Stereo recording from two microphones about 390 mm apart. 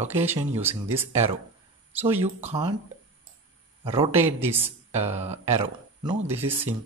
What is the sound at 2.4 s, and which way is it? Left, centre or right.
Speech, centre.